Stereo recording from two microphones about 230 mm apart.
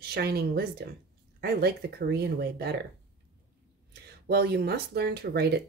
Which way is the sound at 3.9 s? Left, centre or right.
Right.